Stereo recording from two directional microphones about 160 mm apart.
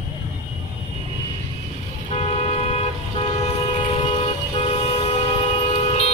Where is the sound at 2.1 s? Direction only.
40° left (ahead or behind).